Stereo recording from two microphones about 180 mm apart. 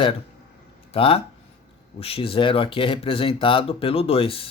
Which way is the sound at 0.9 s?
30° left (ahead or behind).